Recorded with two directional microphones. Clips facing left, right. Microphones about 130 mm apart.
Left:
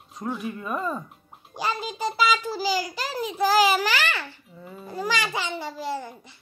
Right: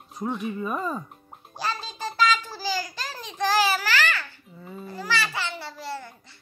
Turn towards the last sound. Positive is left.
turn(degrees=15)  # may be behind; listen again after turning